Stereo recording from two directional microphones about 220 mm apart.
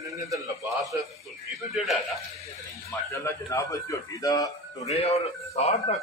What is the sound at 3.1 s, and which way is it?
A man's voice, 10° left (ahead or behind).